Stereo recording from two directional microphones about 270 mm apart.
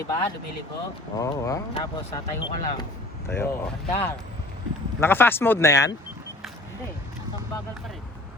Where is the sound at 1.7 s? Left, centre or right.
Left.